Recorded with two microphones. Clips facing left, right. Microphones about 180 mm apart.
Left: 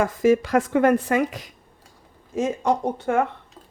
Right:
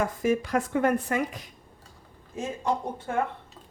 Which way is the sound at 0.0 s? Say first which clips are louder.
Left 7 dB; 90° left.